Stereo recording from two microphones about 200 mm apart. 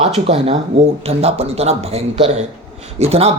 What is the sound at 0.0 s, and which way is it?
Speech, 30° right (ahead or behind).